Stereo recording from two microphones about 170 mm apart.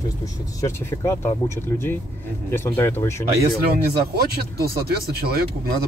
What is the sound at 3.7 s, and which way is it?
Speech, 65° right (ahead or behind).